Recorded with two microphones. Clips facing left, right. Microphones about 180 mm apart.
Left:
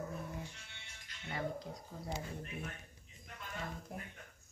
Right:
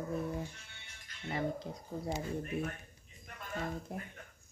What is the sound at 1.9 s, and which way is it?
Speech, 45° right (ahead or behind).